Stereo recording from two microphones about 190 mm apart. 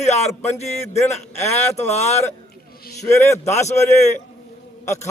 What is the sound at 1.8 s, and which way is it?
Speech, 35° left (ahead or behind).